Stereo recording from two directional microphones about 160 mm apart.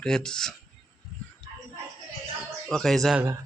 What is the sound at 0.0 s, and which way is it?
Speech, 5° left (ahead or behind).